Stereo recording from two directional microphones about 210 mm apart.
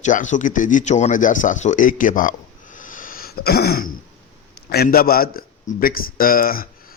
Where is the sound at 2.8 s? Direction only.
40° left (ahead or behind).